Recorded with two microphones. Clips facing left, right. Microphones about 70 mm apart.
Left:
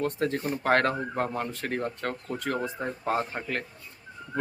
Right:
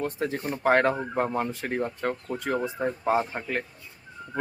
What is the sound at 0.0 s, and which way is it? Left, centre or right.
Speech, centre.